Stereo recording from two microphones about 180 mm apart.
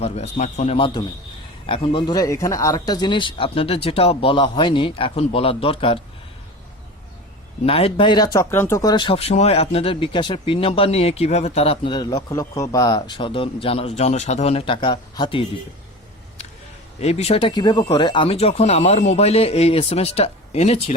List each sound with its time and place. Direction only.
0.0 s speech: 40° left (ahead or behind)
7.6 s speech: 35° left (ahead or behind)
17.0 s speech: 35° left (ahead or behind)